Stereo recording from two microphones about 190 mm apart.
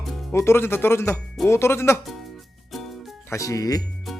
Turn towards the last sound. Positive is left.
turn(degrees=20)  # may be behind; listen again after turning